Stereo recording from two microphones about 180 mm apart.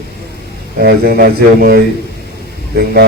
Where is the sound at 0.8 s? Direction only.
60° right (ahead or behind).